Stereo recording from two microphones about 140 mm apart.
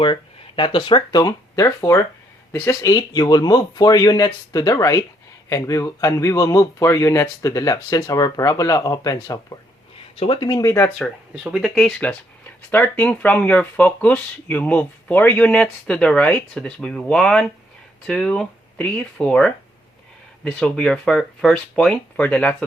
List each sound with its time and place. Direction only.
0.0 s speech: 35° left (ahead or behind)
10.2 s speech: 40° left (ahead or behind)
10.8 s speech: 5° left (ahead or behind)